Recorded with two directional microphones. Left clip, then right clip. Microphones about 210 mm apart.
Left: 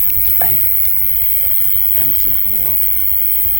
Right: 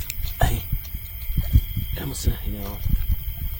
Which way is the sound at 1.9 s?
45° right (ahead or behind).